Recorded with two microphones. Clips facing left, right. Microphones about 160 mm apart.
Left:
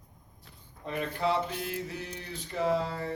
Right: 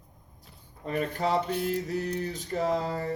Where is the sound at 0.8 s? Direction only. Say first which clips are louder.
Right 2 dB; 40° right (ahead or behind).